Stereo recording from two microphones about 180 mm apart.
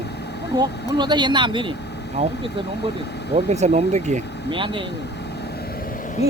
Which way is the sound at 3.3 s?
40° right (ahead or behind).